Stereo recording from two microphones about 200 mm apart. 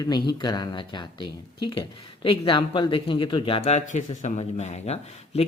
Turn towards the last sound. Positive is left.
turn(degrees=30)  # may be behind; listen again after turning